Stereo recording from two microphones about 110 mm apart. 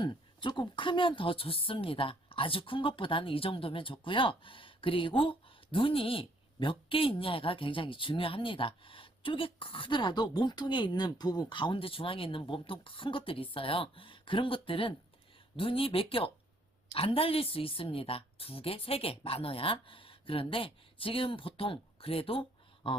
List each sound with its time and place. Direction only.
0.0 s a woman's voice: 45° left (ahead or behind)